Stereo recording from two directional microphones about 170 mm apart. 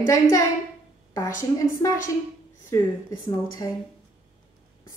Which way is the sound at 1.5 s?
20° left (ahead or behind).